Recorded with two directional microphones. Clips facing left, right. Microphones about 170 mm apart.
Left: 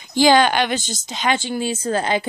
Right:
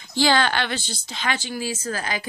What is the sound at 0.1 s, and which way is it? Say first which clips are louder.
A woman's voice: left 6 dB; 15° left (ahead or behind).